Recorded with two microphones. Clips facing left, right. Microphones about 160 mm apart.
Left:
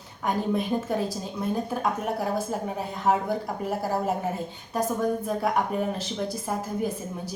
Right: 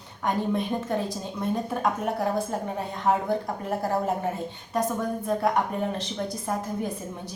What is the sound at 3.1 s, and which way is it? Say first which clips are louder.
Speech: even; 5° left (ahead or behind).